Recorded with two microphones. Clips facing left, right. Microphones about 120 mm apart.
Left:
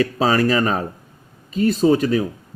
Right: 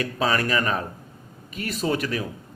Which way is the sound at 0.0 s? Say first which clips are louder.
Left 7 dB; 30° left (ahead or behind).